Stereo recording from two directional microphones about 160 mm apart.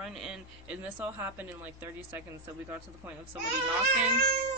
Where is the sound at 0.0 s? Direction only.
5° right (ahead or behind).